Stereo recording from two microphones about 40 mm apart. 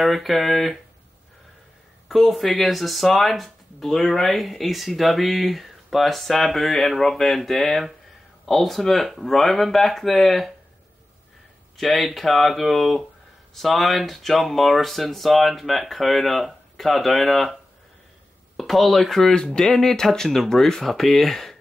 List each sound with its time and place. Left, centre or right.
0.0 s speech: centre
2.0 s speech: centre
11.7 s speech: centre
18.6 s speech: centre
19.3 s speech: centre